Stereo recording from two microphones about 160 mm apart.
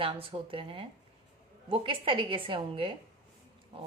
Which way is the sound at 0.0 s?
35° right (ahead or behind).